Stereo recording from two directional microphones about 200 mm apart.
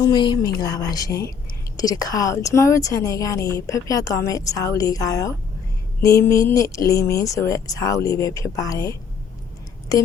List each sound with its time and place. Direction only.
0.0 s a woman's voice: 20° left (ahead or behind)